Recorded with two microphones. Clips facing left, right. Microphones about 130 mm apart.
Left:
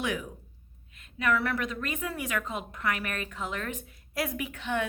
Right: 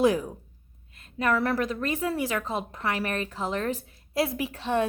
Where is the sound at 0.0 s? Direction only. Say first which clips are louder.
Right 10 dB; 35° right (ahead or behind).